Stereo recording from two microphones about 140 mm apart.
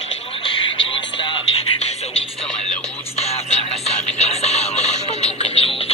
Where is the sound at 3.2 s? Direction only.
50° left (ahead or behind).